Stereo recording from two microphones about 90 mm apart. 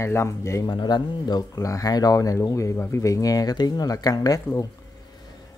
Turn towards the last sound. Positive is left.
turn(degrees=45)  # may be behind; listen again after turning